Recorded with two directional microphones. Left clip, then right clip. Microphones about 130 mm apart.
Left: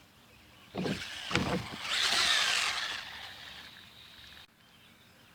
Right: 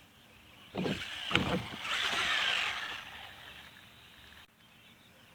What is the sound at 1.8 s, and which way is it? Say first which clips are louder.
Boat: left 3 dB; 40° left (ahead or behind).